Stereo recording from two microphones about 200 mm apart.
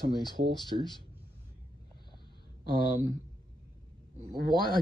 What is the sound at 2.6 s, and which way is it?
Speech, 45° right (ahead or behind).